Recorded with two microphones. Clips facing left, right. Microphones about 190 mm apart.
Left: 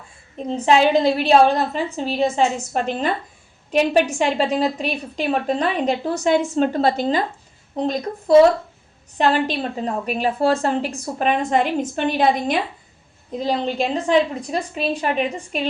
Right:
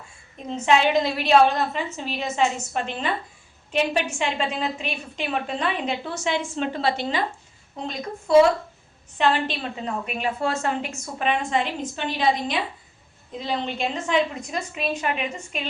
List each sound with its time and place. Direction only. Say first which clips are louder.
0.3 s a woman's voice: left 4 dB; 35° left (ahead or behind); by 12.5 s 55° left (ahead or behind)
13.4 s a woman's voice: left 5 dB; 35° left (ahead or behind)